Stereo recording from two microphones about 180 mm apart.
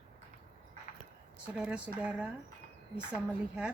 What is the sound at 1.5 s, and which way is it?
A woman's voice, 5° right (ahead or behind).